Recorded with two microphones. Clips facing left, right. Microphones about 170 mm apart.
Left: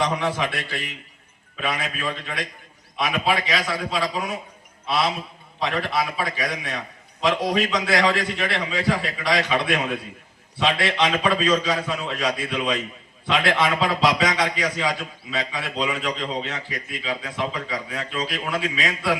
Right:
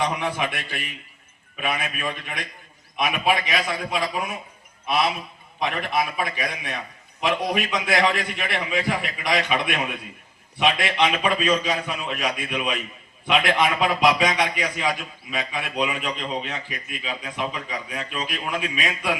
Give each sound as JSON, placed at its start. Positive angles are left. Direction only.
{"t": 0.2, "sound": "a man's voice", "side_deg": -15}